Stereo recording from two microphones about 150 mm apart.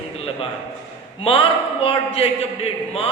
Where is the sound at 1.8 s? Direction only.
40° left (ahead or behind).